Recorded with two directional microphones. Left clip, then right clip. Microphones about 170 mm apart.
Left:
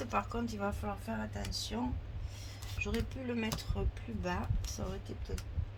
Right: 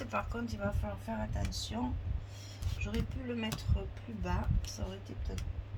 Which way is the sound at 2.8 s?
45° left (ahead or behind).